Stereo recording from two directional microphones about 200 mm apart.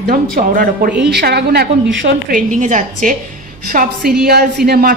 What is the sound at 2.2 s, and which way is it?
Speech, 40° right (ahead or behind).